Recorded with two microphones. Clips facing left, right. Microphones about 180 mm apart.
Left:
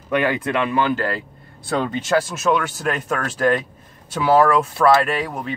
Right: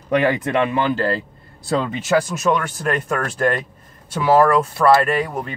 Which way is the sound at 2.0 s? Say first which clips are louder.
Right 2 dB; centre (ahead or behind).